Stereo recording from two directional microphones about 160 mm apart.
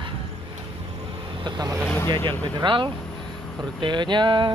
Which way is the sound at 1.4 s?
25° right (ahead or behind).